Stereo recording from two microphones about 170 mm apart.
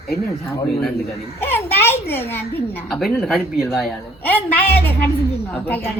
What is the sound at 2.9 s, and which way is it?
Speech, centre (ahead or behind).